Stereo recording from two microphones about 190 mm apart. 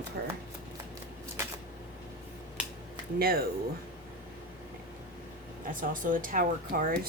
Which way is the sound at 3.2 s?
50° right (ahead or behind).